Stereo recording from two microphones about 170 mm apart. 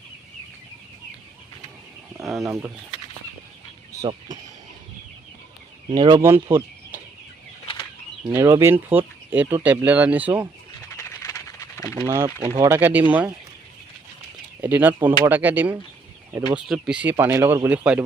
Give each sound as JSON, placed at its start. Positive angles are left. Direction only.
{"t": 2.1, "sound": "speech", "side_deg": 0}
{"t": 2.5, "sound": "speech", "side_deg": -15}
{"t": 5.9, "sound": "speech", "side_deg": -25}
{"t": 6.2, "sound": "speech", "side_deg": -15}
{"t": 8.3, "sound": "speech", "side_deg": -15}
{"t": 10.9, "sound": "a sound", "side_deg": 15}
{"t": 12.0, "sound": "speech", "side_deg": -15}
{"t": 14.6, "sound": "speech", "side_deg": -10}